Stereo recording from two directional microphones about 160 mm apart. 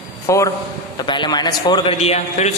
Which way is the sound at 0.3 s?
20° left (ahead or behind).